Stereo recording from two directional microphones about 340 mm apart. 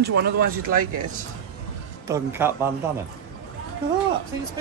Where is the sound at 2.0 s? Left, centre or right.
Centre.